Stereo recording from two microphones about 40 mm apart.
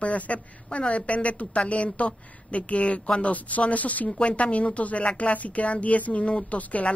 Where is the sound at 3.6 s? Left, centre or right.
Left.